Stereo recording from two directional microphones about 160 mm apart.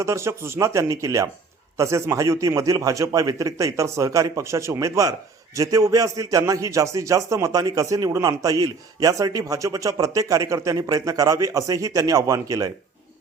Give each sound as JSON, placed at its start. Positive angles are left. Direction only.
{"t": 0.0, "sound": "a man's voice", "side_deg": -20}